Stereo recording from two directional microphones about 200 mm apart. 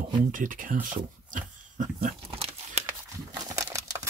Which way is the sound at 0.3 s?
40° right (ahead or behind).